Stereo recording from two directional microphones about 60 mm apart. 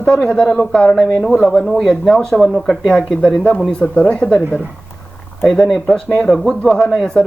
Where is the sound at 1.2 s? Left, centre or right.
Centre.